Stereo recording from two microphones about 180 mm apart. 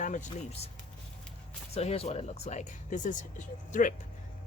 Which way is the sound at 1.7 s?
35° left (ahead or behind).